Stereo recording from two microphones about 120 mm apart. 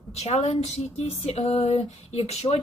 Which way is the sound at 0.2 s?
65° left (ahead or behind).